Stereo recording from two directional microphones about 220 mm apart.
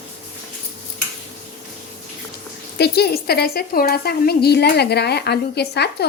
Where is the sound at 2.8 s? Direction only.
45° left (ahead or behind).